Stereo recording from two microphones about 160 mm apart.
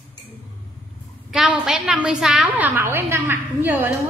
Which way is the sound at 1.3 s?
5° right (ahead or behind).